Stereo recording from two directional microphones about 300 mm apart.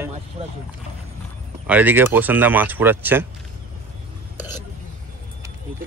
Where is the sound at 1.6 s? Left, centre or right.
Centre.